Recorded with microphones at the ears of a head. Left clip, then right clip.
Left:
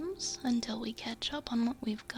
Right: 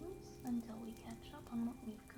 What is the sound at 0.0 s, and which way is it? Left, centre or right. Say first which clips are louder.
Speech: left 13 dB; left.